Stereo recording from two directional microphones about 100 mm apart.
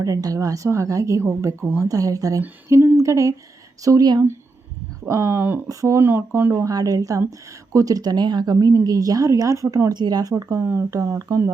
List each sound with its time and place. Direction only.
0.0 s a woman's voice: 35° right (ahead or behind)
5.0 s speech: 30° right (ahead or behind)
5.6 s a woman's voice: 35° right (ahead or behind)
9.9 s a woman's voice: 45° right (ahead or behind)